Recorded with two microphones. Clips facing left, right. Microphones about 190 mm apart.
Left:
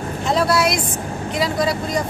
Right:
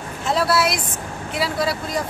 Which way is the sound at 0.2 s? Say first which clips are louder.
Left 2 dB; 5° right (ahead or behind).